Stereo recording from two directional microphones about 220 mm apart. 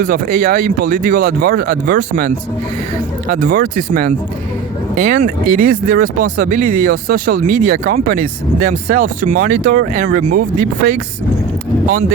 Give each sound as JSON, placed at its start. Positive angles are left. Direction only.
{"t": 0.0, "sound": "speech", "side_deg": -40}